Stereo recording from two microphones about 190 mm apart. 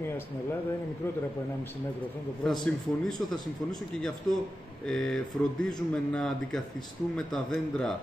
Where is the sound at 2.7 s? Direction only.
Centre (ahead or behind).